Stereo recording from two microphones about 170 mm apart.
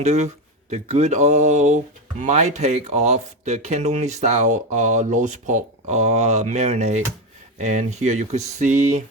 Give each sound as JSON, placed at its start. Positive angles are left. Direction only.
{"t": 0.0, "sound": "speech", "side_deg": -40}